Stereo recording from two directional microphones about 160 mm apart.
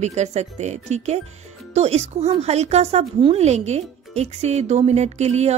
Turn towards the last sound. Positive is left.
turn(degrees=-45)  # may be behind; listen again after turning